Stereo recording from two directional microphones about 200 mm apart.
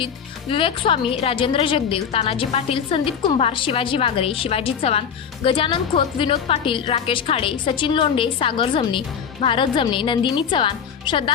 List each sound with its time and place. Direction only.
0.5 s a woman's voice: 25° left (ahead or behind)